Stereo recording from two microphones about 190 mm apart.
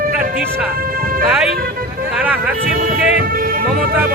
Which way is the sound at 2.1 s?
10° right (ahead or behind).